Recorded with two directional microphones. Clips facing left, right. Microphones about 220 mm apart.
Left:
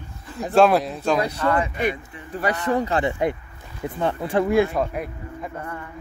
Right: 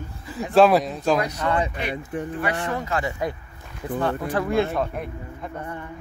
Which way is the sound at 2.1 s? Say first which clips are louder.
Right 13 dB; 50° right (ahead or behind).